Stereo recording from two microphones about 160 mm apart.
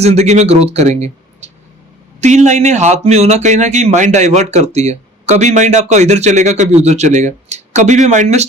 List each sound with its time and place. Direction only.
0.0 s speech: 45° right (ahead or behind)